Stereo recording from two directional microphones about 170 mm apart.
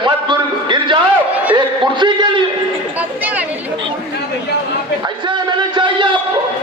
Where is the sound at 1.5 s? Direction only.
25° right (ahead or behind).